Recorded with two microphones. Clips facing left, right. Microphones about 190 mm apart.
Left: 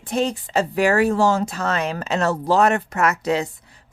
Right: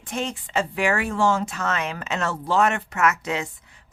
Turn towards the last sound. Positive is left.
turn(degrees=35)  # may be behind; listen again after turning